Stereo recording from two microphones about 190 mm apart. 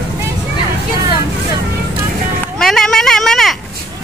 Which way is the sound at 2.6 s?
5° left (ahead or behind).